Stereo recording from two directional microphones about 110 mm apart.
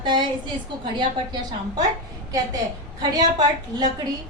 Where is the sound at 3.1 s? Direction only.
40° right (ahead or behind).